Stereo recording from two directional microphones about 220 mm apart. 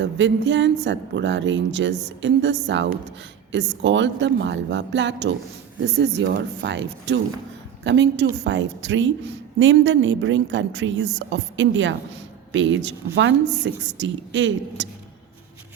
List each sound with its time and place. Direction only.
0.0 s a woman's voice: 55° right (ahead or behind)